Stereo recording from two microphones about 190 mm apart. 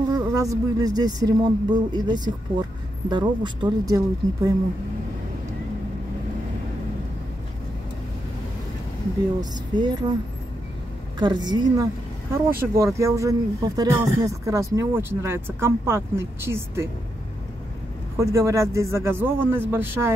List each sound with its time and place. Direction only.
0.1 s speech: 20° right (ahead or behind)
9.5 s speech: 25° right (ahead or behind)
11.1 s speech: 25° right (ahead or behind)
18.1 s speech: 15° right (ahead or behind)